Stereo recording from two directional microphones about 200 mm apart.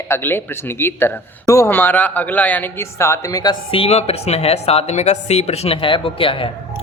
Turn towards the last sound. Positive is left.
turn(degrees=25)  # may be behind; listen again after turning